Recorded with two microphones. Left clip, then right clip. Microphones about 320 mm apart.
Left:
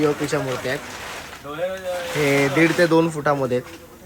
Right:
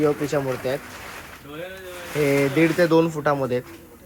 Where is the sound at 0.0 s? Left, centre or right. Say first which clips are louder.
Left 1 dB; centre.